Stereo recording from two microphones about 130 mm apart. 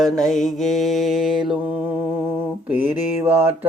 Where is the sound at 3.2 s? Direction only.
15° right (ahead or behind).